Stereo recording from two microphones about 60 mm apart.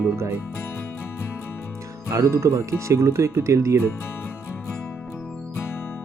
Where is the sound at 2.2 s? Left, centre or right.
Right.